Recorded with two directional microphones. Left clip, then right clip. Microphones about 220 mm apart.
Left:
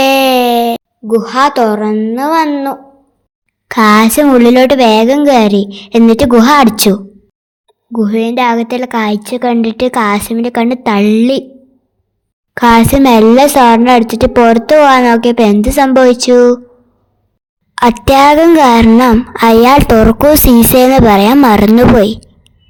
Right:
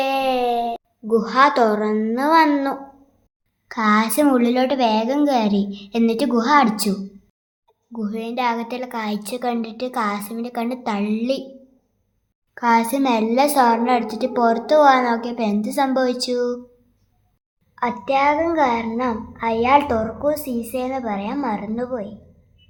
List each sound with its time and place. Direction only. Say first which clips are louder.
0.0 s a sound: left 12 dB; 50° left (ahead or behind)
1.0 s a woman's voice: left 6 dB; 30° left (ahead or behind)
3.7 s a woman's voice: left 12 dB; 40° left (ahead or behind)
7.9 s a woman's voice: left 14 dB; 35° left (ahead or behind)
12.5 s a woman's voice: left 11 dB; 45° left (ahead or behind)
17.7 s a woman's voice: left 13 dB; 55° left (ahead or behind)